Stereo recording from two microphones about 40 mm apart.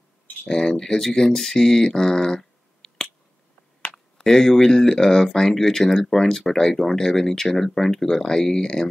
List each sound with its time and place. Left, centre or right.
0.5 s speech: centre